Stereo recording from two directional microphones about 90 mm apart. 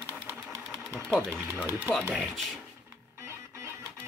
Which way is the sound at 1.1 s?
10° left (ahead or behind).